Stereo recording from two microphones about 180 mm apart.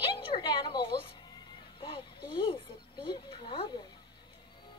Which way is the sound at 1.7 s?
30° left (ahead or behind).